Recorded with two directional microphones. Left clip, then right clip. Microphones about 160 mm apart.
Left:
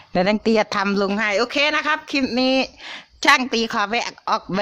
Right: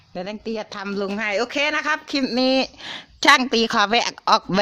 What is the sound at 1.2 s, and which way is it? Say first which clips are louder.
Speech: left 1 dB; 5° left (ahead or behind).